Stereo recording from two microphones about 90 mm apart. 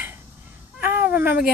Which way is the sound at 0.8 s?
20° right (ahead or behind).